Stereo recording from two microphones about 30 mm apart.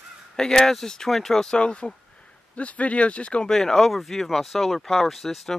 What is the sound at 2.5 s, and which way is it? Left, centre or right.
Speech, left.